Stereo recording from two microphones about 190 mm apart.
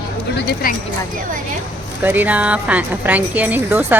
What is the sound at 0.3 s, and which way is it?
Speech, 60° left (ahead or behind).